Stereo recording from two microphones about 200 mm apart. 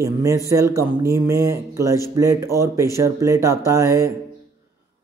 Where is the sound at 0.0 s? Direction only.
15° right (ahead or behind).